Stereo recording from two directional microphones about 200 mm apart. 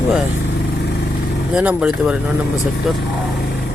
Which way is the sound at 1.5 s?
5° right (ahead or behind).